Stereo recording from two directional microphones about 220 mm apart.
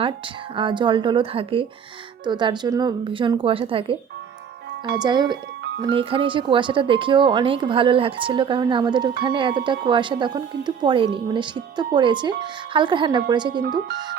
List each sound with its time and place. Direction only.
0.5 s speech: 20° right (ahead or behind)
4.9 s speech: 20° right (ahead or behind)
13.5 s speech: 45° right (ahead or behind)